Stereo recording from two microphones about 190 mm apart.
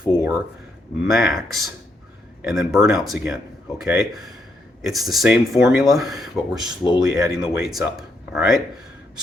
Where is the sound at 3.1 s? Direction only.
Centre (ahead or behind).